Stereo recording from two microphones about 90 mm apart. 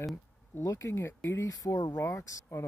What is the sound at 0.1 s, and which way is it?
Speech, 35° left (ahead or behind).